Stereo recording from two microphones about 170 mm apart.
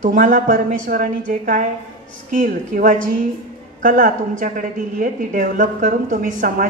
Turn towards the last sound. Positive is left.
turn(degrees=-55)  # may be behind; listen again after turning